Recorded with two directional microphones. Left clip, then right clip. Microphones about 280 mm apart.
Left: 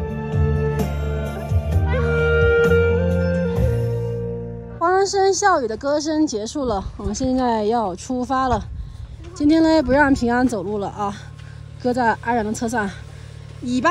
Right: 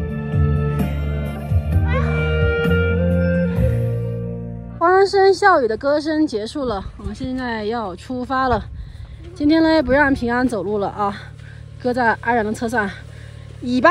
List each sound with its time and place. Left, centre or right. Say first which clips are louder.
0.0 s music: left 1 dB; left
4.7 s a woman's voice: right 4 dB; centre